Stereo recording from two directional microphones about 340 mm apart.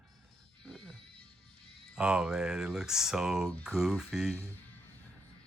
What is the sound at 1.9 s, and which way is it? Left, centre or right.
Speech, centre.